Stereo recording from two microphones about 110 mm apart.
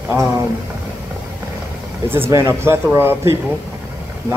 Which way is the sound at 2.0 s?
20° right (ahead or behind).